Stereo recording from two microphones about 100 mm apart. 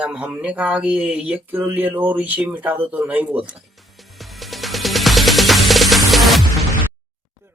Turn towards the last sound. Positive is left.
turn(degrees=0)  # may be behind; listen again after turning